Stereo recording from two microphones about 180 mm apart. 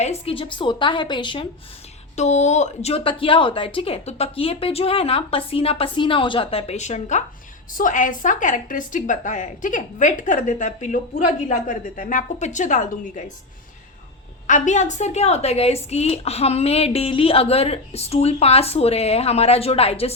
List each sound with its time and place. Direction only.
0.0 s a woman's voice: 35° left (ahead or behind)
2.1 s a woman's voice: 40° left (ahead or behind)
14.4 s a woman's voice: 45° left (ahead or behind)